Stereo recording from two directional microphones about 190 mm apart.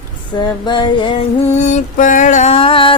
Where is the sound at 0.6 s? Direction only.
25° left (ahead or behind).